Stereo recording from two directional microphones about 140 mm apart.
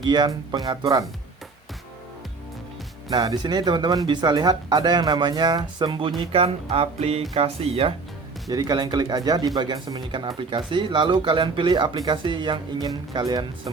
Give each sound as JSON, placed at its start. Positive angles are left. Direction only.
{"t": 0.0, "sound": "speech", "side_deg": -30}
{"t": 3.1, "sound": "speech", "side_deg": -30}
{"t": 8.4, "sound": "speech", "side_deg": -30}